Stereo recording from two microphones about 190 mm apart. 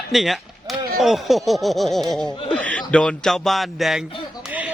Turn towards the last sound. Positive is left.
turn(degrees=-5)  # may be behind; listen again after turning